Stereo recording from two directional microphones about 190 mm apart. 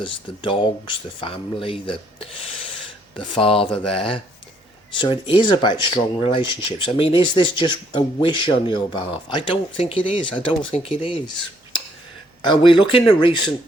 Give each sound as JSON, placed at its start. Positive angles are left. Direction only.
{"t": 0.0, "sound": "speech", "side_deg": 25}